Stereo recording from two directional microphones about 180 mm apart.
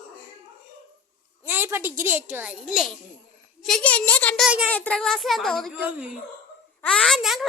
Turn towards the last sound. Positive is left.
turn(degrees=0)  # may be behind; listen again after turning